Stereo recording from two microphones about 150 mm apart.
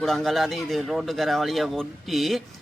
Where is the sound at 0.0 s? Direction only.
Centre (ahead or behind).